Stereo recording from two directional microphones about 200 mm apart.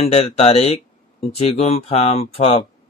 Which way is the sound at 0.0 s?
30° left (ahead or behind).